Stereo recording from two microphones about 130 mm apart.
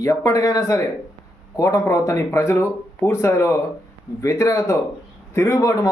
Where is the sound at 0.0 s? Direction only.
25° left (ahead or behind).